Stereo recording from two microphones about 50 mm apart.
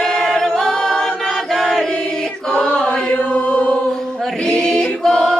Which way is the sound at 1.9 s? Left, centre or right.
Centre.